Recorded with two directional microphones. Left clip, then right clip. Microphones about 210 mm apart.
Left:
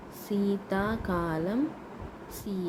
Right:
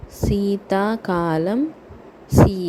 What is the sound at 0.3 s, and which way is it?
Speech, 35° right (ahead or behind).